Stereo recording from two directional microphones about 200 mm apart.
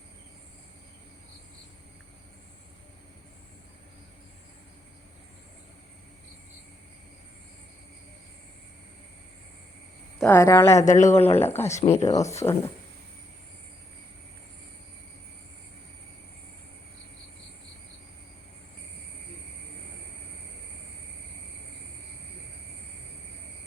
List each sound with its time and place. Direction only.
10.2 s speech: 10° left (ahead or behind)
10.8 s speech: 35° left (ahead or behind)
12.0 s speech: 15° left (ahead or behind)